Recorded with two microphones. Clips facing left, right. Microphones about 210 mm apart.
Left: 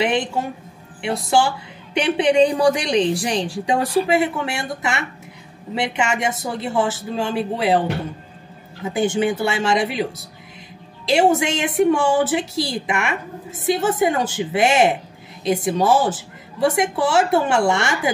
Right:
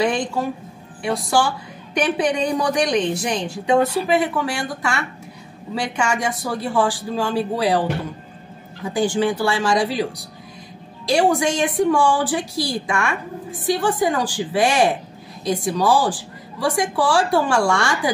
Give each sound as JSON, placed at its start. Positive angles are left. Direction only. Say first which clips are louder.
{"t": 0.0, "sound": "a woman's voice", "louder": "even", "side_deg": 20}
{"t": 8.8, "sound": "a woman's voice", "louder": "even", "side_deg": 20}